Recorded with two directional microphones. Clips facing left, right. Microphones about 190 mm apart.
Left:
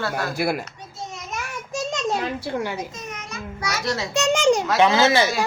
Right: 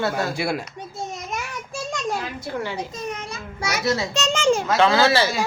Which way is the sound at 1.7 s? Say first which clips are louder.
Left 3 dB; 20° left (ahead or behind).